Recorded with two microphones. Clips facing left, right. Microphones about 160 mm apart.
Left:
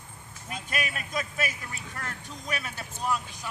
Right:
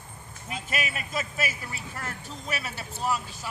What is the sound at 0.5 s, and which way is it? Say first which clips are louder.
Speech: right 1 dB; 5° right (ahead or behind).